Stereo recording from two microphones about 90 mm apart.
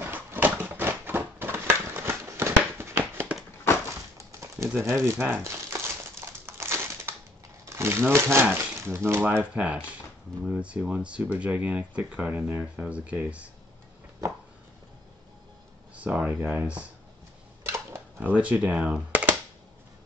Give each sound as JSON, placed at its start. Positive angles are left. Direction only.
{"t": 0.0, "sound": "a sound", "side_deg": -20}
{"t": 4.2, "sound": "a sound", "side_deg": -35}
{"t": 4.6, "sound": "speech", "side_deg": -25}
{"t": 6.4, "sound": "crushing", "side_deg": -30}
{"t": 7.7, "sound": "speech", "side_deg": -30}
{"t": 16.0, "sound": "speech", "side_deg": -15}
{"t": 17.6, "sound": "coin", "side_deg": -25}